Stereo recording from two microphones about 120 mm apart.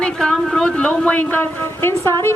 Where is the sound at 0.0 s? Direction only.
5° left (ahead or behind).